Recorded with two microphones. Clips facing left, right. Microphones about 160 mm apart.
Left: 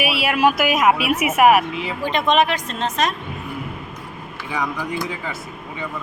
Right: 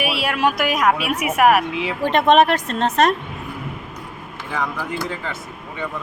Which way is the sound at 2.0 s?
60° right (ahead or behind).